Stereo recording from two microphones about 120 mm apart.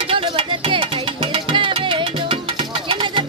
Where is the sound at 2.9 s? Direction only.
45° right (ahead or behind).